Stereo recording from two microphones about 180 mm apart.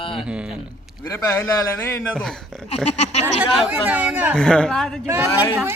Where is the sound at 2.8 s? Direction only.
40° left (ahead or behind).